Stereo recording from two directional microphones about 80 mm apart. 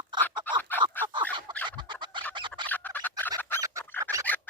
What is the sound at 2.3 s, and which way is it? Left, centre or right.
Squawk, right.